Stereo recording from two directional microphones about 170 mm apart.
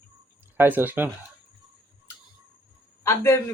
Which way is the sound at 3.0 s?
15° left (ahead or behind).